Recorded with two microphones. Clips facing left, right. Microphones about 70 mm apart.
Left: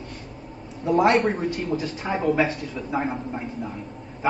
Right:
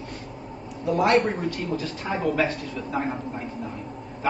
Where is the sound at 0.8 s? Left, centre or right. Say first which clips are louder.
Left 2 dB; left.